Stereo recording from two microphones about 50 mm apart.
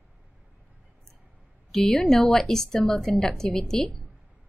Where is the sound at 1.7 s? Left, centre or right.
Centre.